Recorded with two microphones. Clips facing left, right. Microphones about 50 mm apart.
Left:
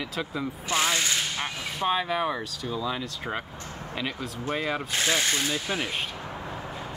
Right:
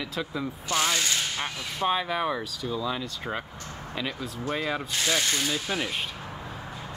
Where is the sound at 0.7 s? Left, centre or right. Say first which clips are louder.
Left 1 dB; centre.